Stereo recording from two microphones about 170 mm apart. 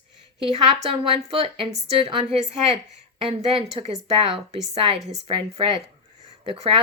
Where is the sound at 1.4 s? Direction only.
35° right (ahead or behind).